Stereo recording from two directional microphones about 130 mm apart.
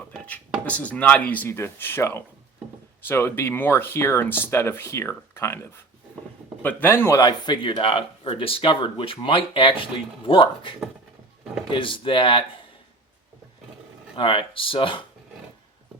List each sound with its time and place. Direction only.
0.1 s speech: 10° left (ahead or behind)
7.2 s speech: 30° left (ahead or behind)
14.2 s speech: 40° left (ahead or behind)